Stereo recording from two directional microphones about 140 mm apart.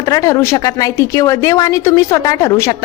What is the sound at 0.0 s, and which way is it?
A woman's voice, 25° left (ahead or behind).